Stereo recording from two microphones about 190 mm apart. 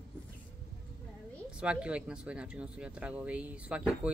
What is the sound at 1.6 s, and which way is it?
Speech, 5° right (ahead or behind).